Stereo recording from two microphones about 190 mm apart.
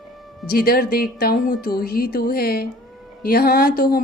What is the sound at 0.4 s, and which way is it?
A woman's voice, 55° left (ahead or behind).